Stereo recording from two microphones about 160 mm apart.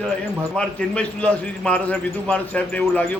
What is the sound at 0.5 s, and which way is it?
A man's voice, 5° left (ahead or behind).